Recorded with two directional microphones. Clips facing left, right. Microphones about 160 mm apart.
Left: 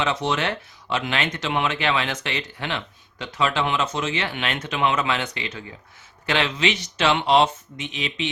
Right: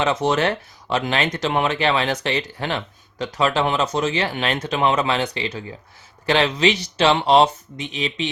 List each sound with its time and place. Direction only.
0.0 s speech: 45° right (ahead or behind)